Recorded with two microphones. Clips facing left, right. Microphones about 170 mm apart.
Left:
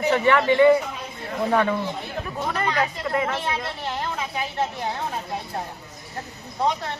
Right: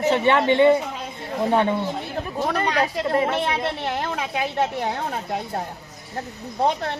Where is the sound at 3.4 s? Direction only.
65° right (ahead or behind).